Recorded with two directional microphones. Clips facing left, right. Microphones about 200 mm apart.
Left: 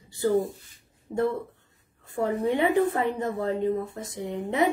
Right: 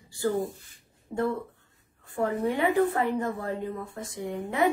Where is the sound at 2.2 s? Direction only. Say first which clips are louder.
Left 2 dB; 20° left (ahead or behind).